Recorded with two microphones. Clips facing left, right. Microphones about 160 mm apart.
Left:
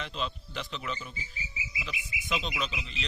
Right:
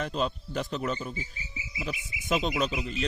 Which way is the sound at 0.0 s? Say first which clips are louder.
Right 6 dB; 45° right (ahead or behind).